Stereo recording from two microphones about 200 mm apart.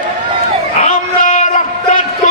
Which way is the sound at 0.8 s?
35° left (ahead or behind).